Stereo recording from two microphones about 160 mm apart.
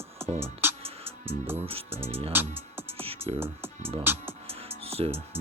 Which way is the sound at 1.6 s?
35° right (ahead or behind).